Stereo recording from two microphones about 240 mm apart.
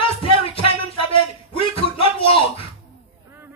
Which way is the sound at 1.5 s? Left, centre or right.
Left.